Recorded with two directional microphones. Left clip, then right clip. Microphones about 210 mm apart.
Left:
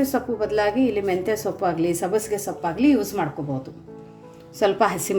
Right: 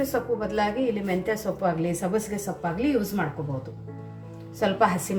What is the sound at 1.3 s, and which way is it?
A woman's voice, 40° left (ahead or behind).